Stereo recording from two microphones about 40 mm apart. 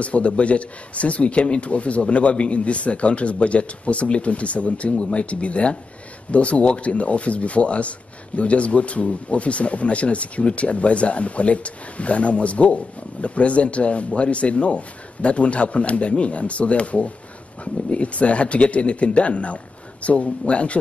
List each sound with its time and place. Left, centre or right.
0.0 s speech: left